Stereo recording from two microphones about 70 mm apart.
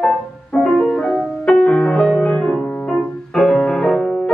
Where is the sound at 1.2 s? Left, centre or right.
Centre.